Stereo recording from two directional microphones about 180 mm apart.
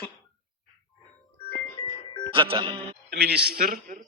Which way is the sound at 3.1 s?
65° right (ahead or behind).